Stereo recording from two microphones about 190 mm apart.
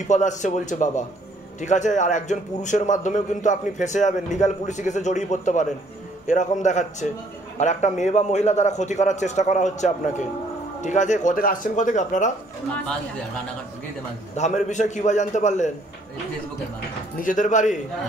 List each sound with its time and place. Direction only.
0.1 s a man's voice: 40° left (ahead or behind)
14.3 s a man's voice: 35° left (ahead or behind)
17.2 s a man's voice: 40° left (ahead or behind)